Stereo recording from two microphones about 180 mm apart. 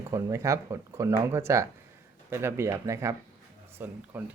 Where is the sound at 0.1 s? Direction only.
15° right (ahead or behind).